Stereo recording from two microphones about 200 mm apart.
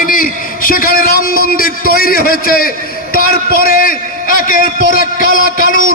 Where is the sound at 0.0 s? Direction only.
45° left (ahead or behind).